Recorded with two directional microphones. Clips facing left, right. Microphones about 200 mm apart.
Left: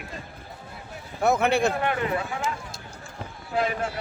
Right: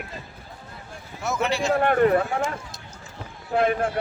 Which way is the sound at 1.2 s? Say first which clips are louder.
Left 4 dB; 55° left (ahead or behind).